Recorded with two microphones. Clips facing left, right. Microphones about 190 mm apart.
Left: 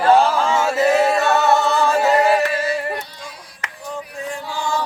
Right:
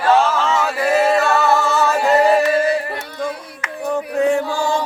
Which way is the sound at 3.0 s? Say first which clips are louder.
Right 8 dB; 60° right (ahead or behind).